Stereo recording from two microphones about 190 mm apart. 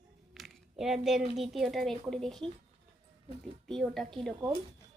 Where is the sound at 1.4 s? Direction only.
Centre (ahead or behind).